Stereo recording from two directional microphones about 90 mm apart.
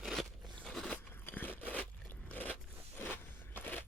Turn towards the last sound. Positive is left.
turn(degrees=20)  # may be behind; listen again after turning